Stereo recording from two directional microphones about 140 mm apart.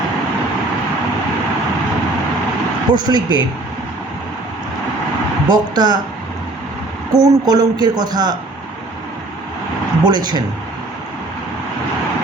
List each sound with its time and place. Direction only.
2.9 s speech: 30° right (ahead or behind)
5.5 s speech: 30° right (ahead or behind)
7.1 s speech: 25° right (ahead or behind)
10.0 s speech: 30° right (ahead or behind)